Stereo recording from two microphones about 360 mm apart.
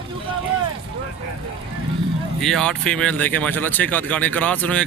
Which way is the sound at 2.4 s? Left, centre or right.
Centre.